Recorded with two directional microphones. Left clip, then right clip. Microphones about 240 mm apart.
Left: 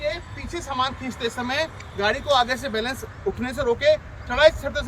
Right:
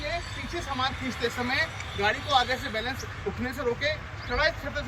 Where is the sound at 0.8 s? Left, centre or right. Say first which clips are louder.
Left 4 dB; left.